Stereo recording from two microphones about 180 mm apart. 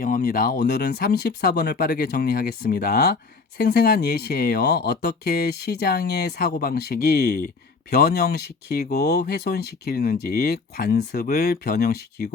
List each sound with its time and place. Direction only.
0.0 s speech: 50° left (ahead or behind)